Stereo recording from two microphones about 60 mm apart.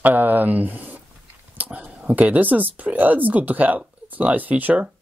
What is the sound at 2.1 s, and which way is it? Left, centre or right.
A man's voice, right.